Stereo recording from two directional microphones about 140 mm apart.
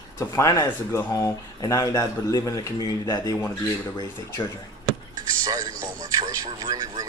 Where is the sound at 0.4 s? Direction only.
25° left (ahead or behind).